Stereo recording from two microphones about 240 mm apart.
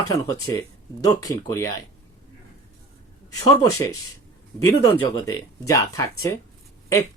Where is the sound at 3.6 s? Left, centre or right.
Centre.